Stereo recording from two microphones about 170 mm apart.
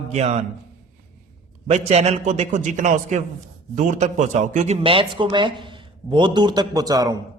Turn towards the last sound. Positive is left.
turn(degrees=-20)  # may be behind; listen again after turning